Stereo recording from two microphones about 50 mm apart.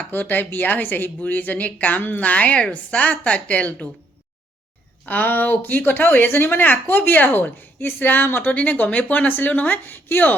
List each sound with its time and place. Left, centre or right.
0.1 s a woman's voice: left
5.0 s a woman's voice: left
8.4 s a woman's voice: left